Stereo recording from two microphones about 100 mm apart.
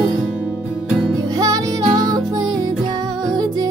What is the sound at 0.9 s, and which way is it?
Music, 5° right (ahead or behind).